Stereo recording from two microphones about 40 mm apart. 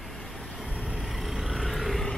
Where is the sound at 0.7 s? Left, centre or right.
Right.